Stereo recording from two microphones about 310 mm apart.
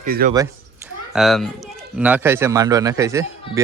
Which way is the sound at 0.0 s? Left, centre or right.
Right.